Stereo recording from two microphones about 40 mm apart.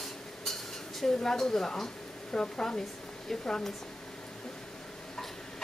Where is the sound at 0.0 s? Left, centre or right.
Centre.